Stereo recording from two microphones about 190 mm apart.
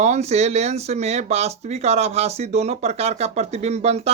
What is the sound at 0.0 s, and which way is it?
Speech, 35° right (ahead or behind).